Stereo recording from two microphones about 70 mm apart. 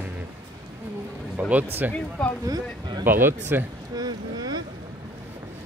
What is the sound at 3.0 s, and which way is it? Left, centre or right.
Speech, right.